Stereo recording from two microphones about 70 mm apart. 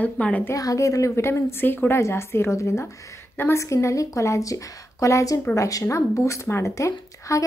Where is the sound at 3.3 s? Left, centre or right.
Left.